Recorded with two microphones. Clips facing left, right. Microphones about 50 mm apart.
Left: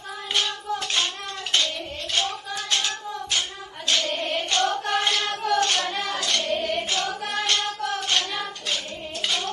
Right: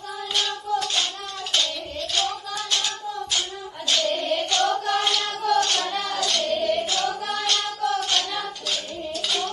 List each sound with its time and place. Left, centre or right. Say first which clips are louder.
0.3 s child singing: right 1 dB; left
7.3 s singing: even; left